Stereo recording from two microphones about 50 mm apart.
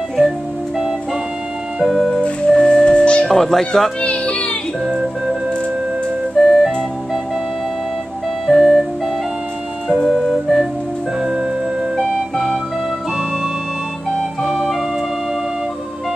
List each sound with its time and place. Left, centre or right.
1.8 s music: centre
2.2 s music: centre
3.3 s speech: centre
4.0 s child singing: left
6.4 s music: centre
8.5 s music: centre
10.0 s music: centre
12.0 s music: centre
14.5 s music: centre